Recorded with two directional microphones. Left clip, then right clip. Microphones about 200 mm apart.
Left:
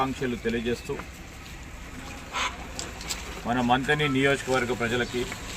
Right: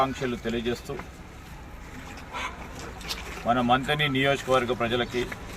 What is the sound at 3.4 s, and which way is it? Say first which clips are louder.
Speech: right 1 dB; 5° right (ahead or behind).